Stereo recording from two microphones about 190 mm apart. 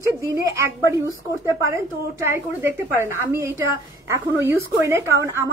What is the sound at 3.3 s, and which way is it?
A woman's voice, 15° right (ahead or behind).